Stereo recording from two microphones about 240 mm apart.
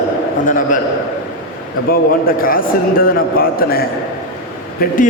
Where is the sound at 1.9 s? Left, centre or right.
Left.